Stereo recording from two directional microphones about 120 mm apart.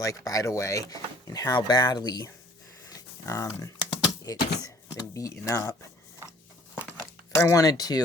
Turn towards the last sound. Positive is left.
turn(degrees=35)  # may be behind; listen again after turning